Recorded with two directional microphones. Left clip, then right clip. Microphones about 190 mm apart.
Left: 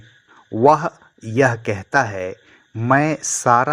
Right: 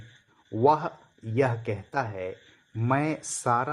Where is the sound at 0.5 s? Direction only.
20° left (ahead or behind).